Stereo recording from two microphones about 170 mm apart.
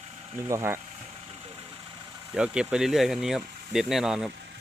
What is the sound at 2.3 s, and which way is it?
Speech, 5° right (ahead or behind).